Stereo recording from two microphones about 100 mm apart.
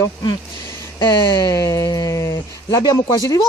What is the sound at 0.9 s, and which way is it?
Speech, 40° left (ahead or behind).